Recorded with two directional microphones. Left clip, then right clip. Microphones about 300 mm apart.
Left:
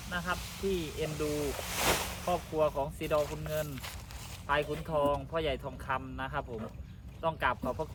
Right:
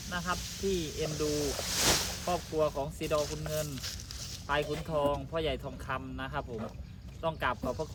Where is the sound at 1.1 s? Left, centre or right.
Centre.